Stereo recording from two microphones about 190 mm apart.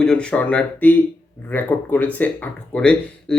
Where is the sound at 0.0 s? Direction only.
5° left (ahead or behind).